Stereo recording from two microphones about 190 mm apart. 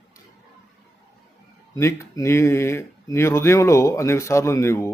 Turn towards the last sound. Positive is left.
turn(degrees=15)  # may be behind; listen again after turning